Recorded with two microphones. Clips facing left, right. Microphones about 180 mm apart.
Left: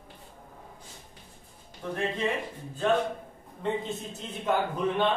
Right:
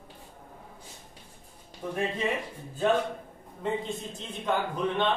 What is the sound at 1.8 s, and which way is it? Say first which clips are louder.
Speech: even; 10° right (ahead or behind).